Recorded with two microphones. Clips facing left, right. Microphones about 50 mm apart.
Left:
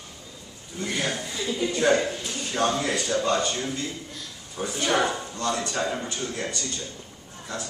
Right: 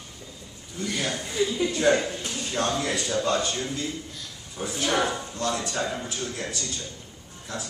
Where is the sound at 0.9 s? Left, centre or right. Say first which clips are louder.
Right 3 dB; centre.